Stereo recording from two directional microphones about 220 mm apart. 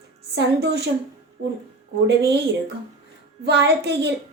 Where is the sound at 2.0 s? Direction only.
50° right (ahead or behind).